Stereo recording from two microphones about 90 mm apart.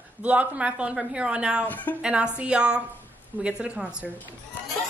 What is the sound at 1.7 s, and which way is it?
Speech, 20° left (ahead or behind).